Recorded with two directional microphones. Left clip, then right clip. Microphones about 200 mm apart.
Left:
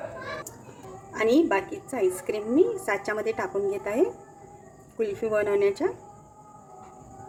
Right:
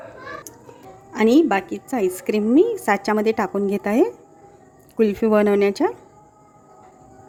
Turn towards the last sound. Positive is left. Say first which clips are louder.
# right 6 dB
turn(degrees=-40)  # may be behind; listen again after turning